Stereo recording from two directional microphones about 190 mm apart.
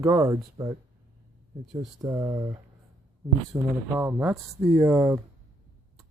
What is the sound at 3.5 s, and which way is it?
Speech, 10° right (ahead or behind).